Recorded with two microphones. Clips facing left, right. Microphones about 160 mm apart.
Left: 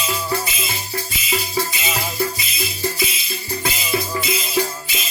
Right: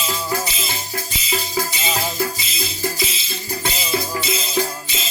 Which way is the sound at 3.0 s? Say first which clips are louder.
Left 1 dB; 25° right (ahead or behind).